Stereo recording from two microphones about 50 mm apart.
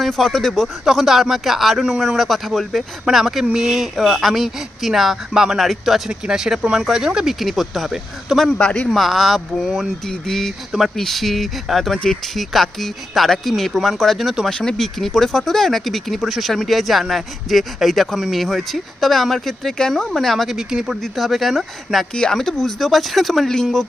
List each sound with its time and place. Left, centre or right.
0.0 s speech: centre
6.1 s speech: centre
8.5 s a man's voice: left
8.9 s speech: centre
10.7 s speech: centre
14.6 s speech: centre
20.6 s speech: centre
21.0 s speech: centre
22.1 s speech: centre